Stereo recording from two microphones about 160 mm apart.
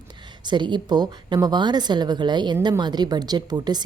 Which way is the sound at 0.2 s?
30° right (ahead or behind).